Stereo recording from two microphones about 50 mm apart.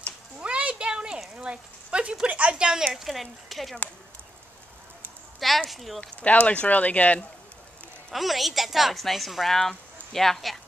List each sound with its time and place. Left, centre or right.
0.4 s a sound: right
1.3 s speech: centre
2.9 s a woman's voice: centre
5.7 s a woman's voice: centre
5.9 s speech: left
8.1 s a woman's voice: centre